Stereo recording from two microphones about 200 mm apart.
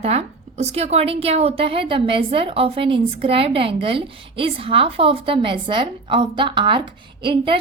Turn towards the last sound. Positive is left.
turn(degrees=-25)  # may be behind; listen again after turning